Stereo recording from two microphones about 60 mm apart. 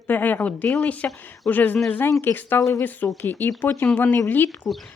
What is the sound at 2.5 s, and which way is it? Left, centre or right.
Speech, left.